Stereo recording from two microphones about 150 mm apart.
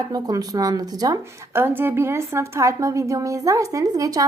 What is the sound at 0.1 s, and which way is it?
Speech, 25° right (ahead or behind).